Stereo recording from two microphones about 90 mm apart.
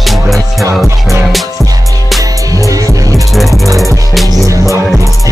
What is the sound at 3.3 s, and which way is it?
Music, centre (ahead or behind).